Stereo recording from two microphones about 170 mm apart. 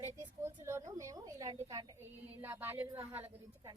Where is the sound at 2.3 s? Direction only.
10° right (ahead or behind).